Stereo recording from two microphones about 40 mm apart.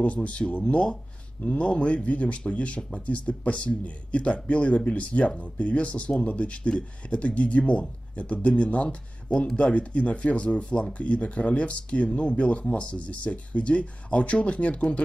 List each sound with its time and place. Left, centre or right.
0.0 s speech: left